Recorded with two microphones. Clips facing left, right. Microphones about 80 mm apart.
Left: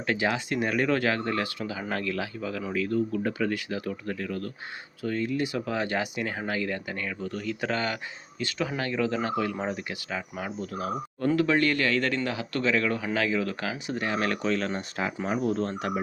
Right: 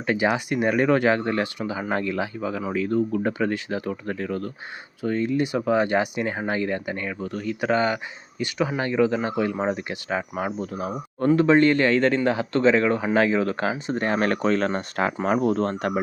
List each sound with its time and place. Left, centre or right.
0.1 s speech: centre; by 10.7 s right
10.7 s speech: right